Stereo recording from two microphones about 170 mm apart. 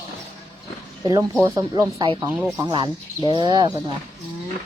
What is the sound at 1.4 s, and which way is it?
Speech, 20° right (ahead or behind).